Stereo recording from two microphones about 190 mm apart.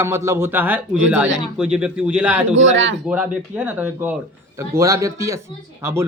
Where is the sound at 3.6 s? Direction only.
10° right (ahead or behind).